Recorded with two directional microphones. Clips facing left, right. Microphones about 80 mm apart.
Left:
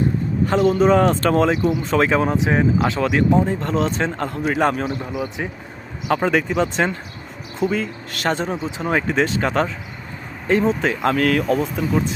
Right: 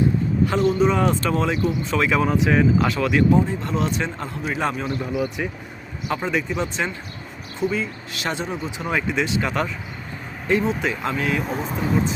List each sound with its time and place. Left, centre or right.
0.4 s speech: left
3.0 s speech: left
6.1 s speech: left
11.0 s speech: left